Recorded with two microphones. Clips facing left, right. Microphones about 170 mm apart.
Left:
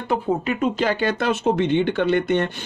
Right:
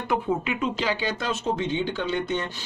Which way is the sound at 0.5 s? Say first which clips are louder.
Left 5 dB; 50° left (ahead or behind).